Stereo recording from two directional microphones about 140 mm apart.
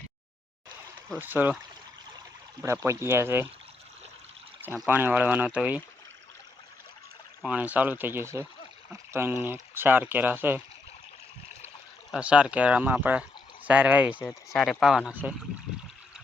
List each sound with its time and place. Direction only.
1.2 s speech: 15° right (ahead or behind)
2.8 s speech: 20° right (ahead or behind)
4.9 s speech: 15° right (ahead or behind)
7.4 s speech: 10° right (ahead or behind)
12.1 s speech: 5° right (ahead or behind)
14.3 s speech: centre (ahead or behind)